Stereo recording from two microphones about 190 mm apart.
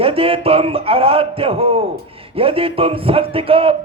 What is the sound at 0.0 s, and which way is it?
A man's voice, 30° right (ahead or behind).